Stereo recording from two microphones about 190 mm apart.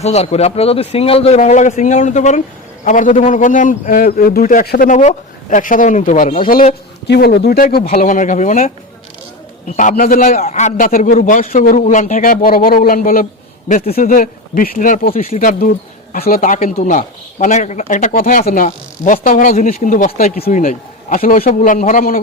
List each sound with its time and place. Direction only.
0.0 s a man's voice: 35° left (ahead or behind); by 4.9 s 50° left (ahead or behind)
4.9 s speech: 40° left (ahead or behind)
7.1 s speech: 60° left (ahead or behind)
7.9 s a man's voice: 40° left (ahead or behind)